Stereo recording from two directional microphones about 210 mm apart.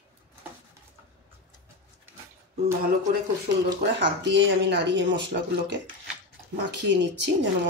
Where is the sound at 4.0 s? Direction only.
55° right (ahead or behind).